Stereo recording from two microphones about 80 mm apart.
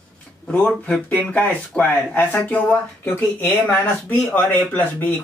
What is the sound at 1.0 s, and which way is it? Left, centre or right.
Speech, centre.